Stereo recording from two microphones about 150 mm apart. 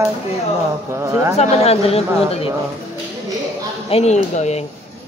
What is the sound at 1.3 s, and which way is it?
Speech, 40° left (ahead or behind).